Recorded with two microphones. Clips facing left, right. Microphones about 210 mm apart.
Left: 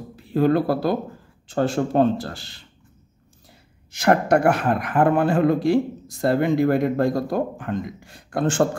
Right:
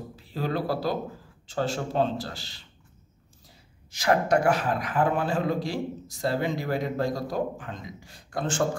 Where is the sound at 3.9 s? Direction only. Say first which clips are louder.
Left 5 dB; 55° left (ahead or behind).